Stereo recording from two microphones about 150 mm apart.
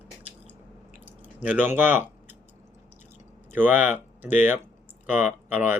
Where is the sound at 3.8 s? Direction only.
55° left (ahead or behind).